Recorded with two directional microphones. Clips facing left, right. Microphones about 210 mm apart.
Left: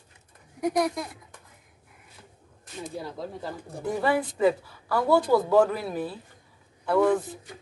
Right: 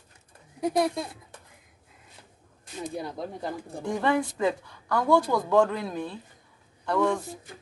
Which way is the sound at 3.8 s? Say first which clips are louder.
Even; 5° left (ahead or behind).